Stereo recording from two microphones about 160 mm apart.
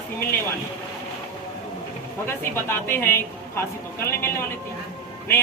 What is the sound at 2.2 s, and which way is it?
A woman's voice, 15° left (ahead or behind).